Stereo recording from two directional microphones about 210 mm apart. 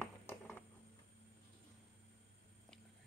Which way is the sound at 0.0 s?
5° left (ahead or behind).